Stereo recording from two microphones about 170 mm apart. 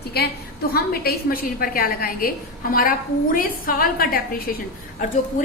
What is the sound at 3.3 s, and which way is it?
A woman's voice, 55° left (ahead or behind).